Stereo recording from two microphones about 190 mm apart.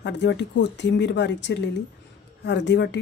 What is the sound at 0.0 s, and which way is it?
A woman's voice, 70° left (ahead or behind).